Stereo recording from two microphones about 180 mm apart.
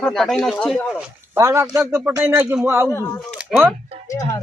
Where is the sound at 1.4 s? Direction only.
15° right (ahead or behind).